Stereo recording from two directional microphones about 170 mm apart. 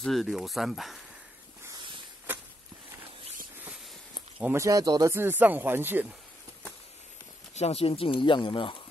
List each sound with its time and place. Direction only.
0.0 s speech: centre (ahead or behind)
4.4 s speech: 15° right (ahead or behind)
7.5 s speech: 35° left (ahead or behind)